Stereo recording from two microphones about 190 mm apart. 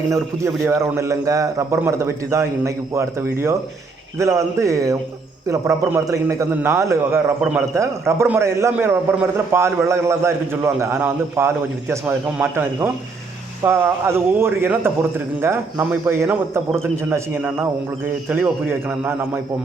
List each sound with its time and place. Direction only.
0.1 s a man's voice: 15° right (ahead or behind)